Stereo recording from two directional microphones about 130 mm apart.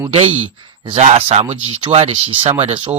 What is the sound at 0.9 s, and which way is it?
Speech, 55° right (ahead or behind).